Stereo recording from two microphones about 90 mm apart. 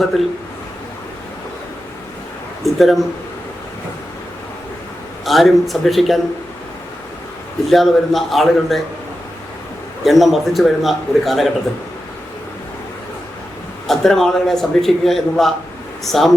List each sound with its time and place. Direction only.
2.6 s a man's voice: centre (ahead or behind)
5.2 s a man's voice: centre (ahead or behind)
7.7 s a man's voice: centre (ahead or behind)
10.0 s a man's voice: centre (ahead or behind)
13.8 s a man's voice: 5° left (ahead or behind)